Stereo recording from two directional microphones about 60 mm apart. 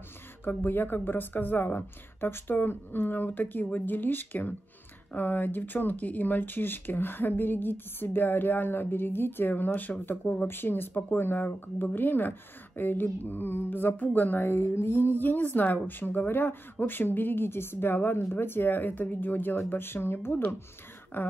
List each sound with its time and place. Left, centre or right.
0.5 s speech: left